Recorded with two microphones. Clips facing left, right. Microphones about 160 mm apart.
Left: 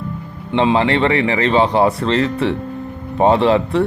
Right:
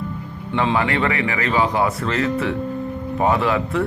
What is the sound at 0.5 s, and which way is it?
Speech, 25° left (ahead or behind).